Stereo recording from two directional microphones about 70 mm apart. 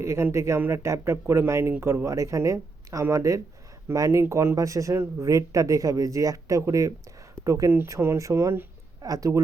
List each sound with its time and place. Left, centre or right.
0.0 s speech: right
2.0 s speech: right
9.0 s speech: right